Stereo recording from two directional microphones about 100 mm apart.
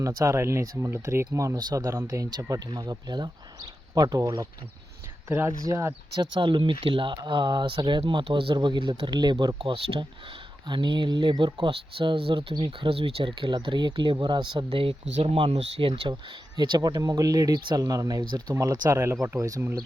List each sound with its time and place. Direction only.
0.0 s speech: 30° right (ahead or behind)
5.5 s speech: 30° right (ahead or behind)
6.1 s speech: 55° right (ahead or behind)
8.5 s speech: 50° right (ahead or behind)
9.6 s speech: 60° right (ahead or behind)
10.7 s speech: 50° right (ahead or behind)
11.7 s speech: 65° right (ahead or behind)
16.6 s speech: 45° right (ahead or behind)